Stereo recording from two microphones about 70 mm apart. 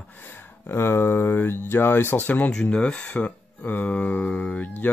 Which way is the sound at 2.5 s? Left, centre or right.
Centre.